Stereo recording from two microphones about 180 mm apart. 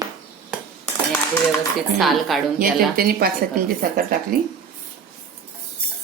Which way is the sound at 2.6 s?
55° right (ahead or behind).